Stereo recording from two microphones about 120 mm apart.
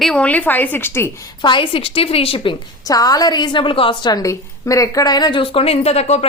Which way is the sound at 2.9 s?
30° left (ahead or behind).